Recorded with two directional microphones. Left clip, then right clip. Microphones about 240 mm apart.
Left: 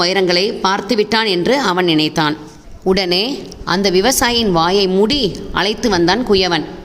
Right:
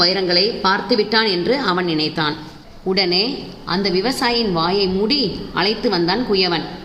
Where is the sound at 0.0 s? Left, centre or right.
Left.